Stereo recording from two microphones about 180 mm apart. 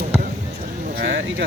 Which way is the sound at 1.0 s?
85° right.